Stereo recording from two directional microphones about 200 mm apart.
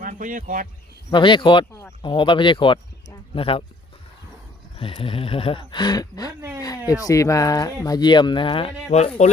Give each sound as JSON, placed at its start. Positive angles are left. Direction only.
{"t": 0.0, "sound": "speech", "side_deg": -40}
{"t": 1.1, "sound": "speech", "side_deg": 25}
{"t": 4.8, "sound": "speech", "side_deg": 25}